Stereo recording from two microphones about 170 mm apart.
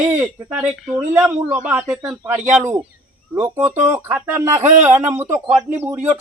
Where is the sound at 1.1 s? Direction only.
10° right (ahead or behind).